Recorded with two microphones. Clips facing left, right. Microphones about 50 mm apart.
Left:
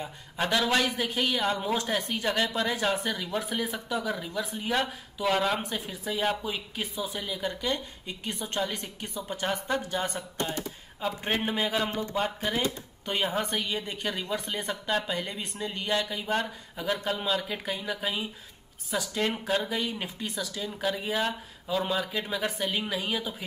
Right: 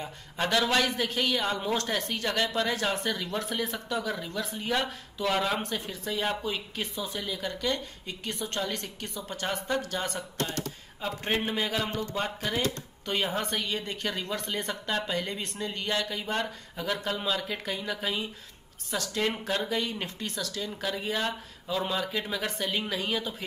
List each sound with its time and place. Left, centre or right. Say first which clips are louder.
0.0 s speech: even; centre
1.8 s speech: left 1 dB; centre
11.0 s speech: left 1 dB; centre
11.9 s speech: left 1 dB; left
12.4 s speech: left 1 dB; centre
14.5 s speech: left 1 dB; centre